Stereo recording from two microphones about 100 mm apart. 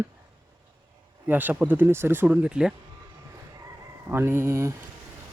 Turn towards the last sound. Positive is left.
turn(degrees=-30)  # may be behind; listen again after turning